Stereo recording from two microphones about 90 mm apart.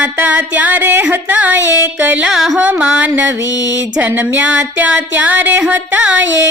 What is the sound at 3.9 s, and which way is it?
Music, 20° right (ahead or behind).